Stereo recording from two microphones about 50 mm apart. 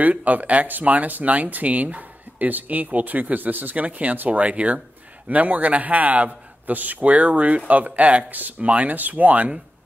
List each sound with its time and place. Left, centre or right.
0.0 s a man's voice: right